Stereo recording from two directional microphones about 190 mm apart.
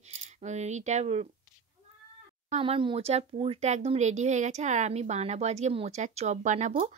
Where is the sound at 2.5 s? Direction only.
30° right (ahead or behind).